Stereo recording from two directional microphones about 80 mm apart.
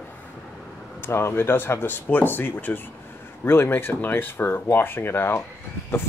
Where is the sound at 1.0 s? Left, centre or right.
Left.